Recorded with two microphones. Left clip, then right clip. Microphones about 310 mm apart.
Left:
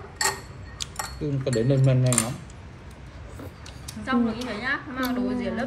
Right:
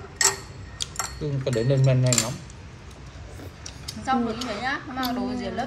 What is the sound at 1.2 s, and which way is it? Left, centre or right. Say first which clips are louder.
Speech: left 1 dB; centre.